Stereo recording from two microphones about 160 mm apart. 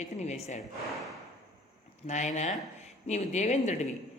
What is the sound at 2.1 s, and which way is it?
Speech, 50° left (ahead or behind).